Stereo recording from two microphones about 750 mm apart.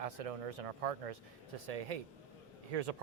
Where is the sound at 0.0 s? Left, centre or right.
Right.